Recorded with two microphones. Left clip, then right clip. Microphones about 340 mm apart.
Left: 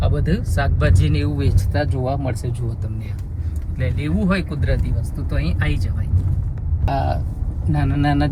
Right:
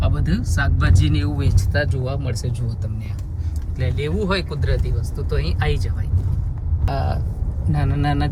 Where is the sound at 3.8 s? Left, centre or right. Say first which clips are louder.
Right 1 dB; centre.